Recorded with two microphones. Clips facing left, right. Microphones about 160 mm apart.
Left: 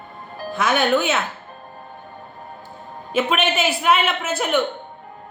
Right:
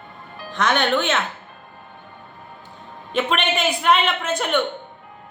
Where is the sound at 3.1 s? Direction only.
5° left (ahead or behind).